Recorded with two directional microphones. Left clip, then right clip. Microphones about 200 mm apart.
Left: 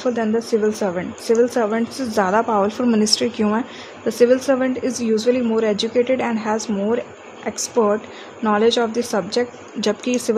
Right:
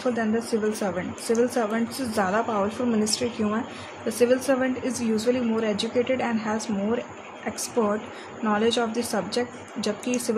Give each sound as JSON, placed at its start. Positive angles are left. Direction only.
{"t": 0.0, "sound": "a woman's voice", "side_deg": 30}